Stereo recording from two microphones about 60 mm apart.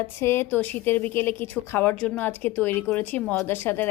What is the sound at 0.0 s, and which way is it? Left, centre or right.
A woman's voice, left.